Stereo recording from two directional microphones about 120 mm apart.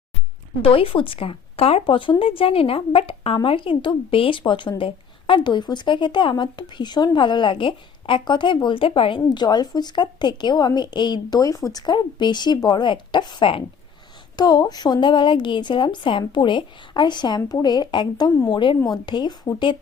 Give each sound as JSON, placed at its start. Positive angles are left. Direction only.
{"t": 0.6, "sound": "a woman's voice", "side_deg": 50}
{"t": 14.3, "sound": "speech", "side_deg": 35}